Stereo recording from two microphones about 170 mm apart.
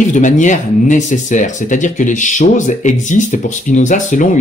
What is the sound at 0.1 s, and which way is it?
Speech, 45° left (ahead or behind).